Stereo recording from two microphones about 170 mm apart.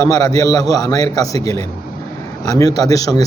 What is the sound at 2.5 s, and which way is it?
Speech, 20° left (ahead or behind).